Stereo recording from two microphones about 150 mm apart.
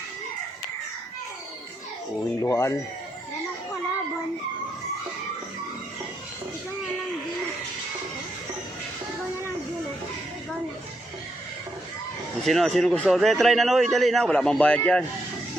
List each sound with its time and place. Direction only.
2.4 s speech: 20° left (ahead or behind)
12.5 s a man's voice: centre (ahead or behind)